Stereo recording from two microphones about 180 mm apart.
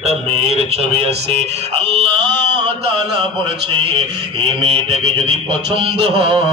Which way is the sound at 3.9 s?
30° right (ahead or behind).